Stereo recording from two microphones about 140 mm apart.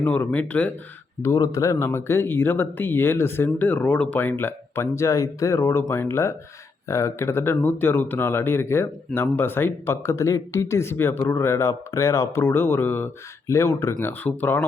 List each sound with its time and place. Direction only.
0.0 s speech: 10° left (ahead or behind)
1.2 s speech: 20° left (ahead or behind)